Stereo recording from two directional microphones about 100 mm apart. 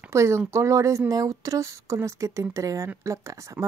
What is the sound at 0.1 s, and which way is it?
Speech, 30° right (ahead or behind).